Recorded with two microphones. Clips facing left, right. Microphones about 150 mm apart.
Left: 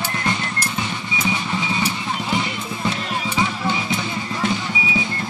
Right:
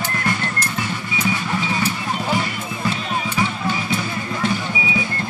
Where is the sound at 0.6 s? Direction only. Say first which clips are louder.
Right 1 dB; 20° left (ahead or behind).